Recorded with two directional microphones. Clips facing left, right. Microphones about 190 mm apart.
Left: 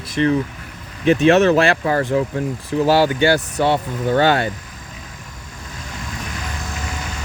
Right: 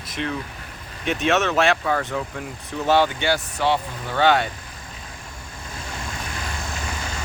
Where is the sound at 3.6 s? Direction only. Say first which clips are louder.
Left 5 dB; 50° left (ahead or behind).